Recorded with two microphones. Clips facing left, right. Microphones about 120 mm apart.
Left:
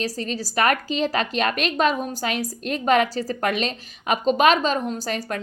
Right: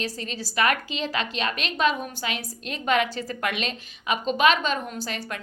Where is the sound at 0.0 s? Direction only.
40° left (ahead or behind).